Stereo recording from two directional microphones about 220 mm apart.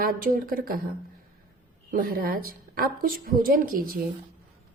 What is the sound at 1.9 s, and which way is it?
A woman's voice, 40° right (ahead or behind).